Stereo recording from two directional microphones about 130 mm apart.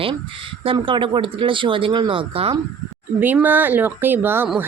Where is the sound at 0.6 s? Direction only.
40° right (ahead or behind).